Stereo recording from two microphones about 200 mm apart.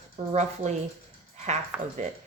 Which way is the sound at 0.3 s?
35° right (ahead or behind).